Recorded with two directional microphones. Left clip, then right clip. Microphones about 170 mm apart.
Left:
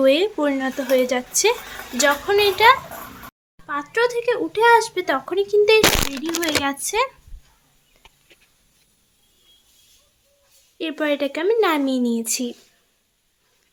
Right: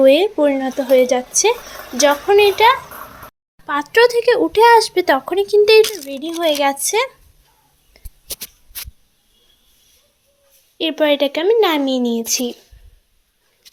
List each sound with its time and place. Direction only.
0.0 s speech: 5° right (ahead or behind)
3.7 s a child's voice: 25° right (ahead or behind)
6.4 s speech: 15° right (ahead or behind)
7.9 s a sound: 25° right (ahead or behind)
10.8 s speech: 10° right (ahead or behind)